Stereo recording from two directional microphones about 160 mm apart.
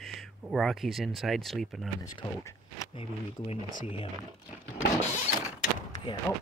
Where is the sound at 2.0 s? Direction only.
20° left (ahead or behind).